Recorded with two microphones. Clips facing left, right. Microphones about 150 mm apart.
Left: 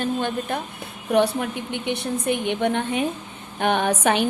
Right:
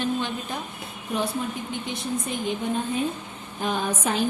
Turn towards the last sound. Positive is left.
turn(degrees=70)  # may be behind; listen again after turning